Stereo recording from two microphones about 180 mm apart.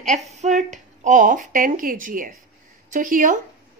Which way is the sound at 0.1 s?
40° right (ahead or behind).